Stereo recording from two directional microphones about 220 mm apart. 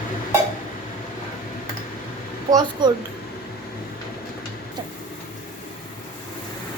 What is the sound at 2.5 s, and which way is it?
Speech, 20° right (ahead or behind).